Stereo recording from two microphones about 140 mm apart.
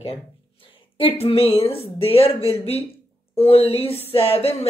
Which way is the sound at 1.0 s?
45° left (ahead or behind).